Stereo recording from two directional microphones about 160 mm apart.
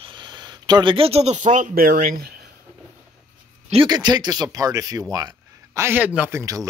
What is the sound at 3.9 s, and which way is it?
Speech, 25° right (ahead or behind).